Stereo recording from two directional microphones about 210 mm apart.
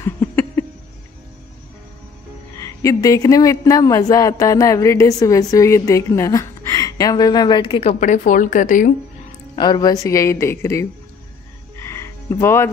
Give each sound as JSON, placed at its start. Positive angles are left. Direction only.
{"t": 0.0, "sound": "a sound", "side_deg": 10}
{"t": 2.6, "sound": "a woman's voice", "side_deg": 15}
{"t": 9.6, "sound": "a woman's voice", "side_deg": 20}
{"t": 11.8, "sound": "frog", "side_deg": 10}